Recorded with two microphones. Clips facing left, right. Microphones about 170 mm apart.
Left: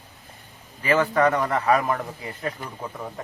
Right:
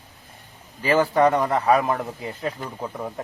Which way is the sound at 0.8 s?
35° right (ahead or behind).